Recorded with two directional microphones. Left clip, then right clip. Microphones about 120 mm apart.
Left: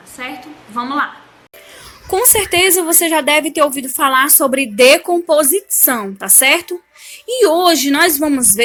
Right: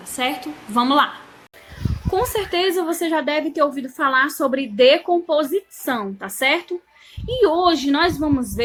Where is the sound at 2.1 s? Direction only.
30° left (ahead or behind).